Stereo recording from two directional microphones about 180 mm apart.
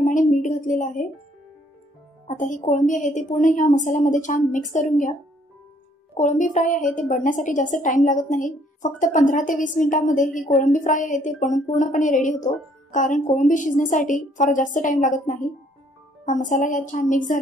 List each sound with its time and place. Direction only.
0.4 s a sound: 45° left (ahead or behind)
2.2 s a woman's voice: 45° left (ahead or behind)
6.1 s a woman's voice: 45° left (ahead or behind)